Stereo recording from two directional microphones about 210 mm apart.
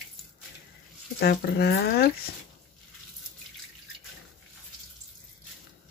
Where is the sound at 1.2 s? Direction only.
50° left (ahead or behind).